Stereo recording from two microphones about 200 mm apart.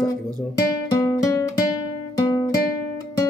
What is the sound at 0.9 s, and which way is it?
Music, 15° left (ahead or behind).